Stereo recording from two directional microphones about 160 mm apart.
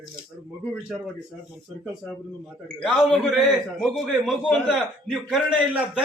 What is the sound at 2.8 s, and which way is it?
A man's voice, centre (ahead or behind).